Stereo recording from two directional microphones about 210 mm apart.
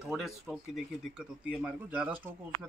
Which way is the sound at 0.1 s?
Centre (ahead or behind).